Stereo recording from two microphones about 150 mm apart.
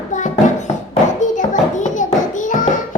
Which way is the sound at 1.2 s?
55° left (ahead or behind).